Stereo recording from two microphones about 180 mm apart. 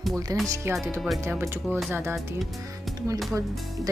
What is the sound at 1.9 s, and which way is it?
Music, 10° right (ahead or behind).